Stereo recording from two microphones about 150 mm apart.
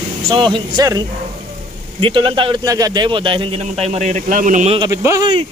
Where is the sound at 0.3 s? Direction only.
30° right (ahead or behind); by 4.6 s 60° right (ahead or behind).